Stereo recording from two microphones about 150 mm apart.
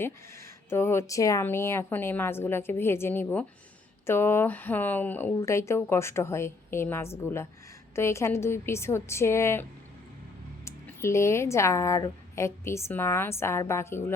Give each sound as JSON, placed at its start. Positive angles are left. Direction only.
{"t": 0.0, "sound": "speech", "side_deg": 15}
{"t": 10.7, "sound": "speech", "side_deg": 20}